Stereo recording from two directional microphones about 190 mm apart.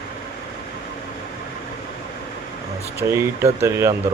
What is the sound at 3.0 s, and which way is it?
Speech, 20° right (ahead or behind).